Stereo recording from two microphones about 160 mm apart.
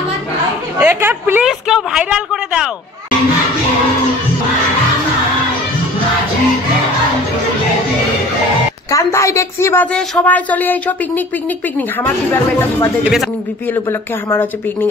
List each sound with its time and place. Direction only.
0.7 s a woman's voice: 10° right (ahead or behind)
8.9 s speech: 20° left (ahead or behind)
13.0 s a woman's voice: centre (ahead or behind)
13.8 s speech: 15° left (ahead or behind)